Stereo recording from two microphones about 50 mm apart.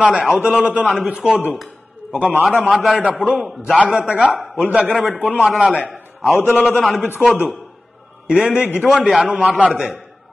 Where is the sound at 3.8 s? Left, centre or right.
Right.